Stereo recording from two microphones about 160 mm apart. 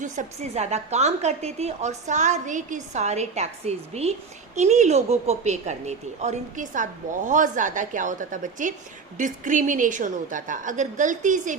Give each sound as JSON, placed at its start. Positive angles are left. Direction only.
{"t": 0.0, "sound": "a woman's voice", "side_deg": -45}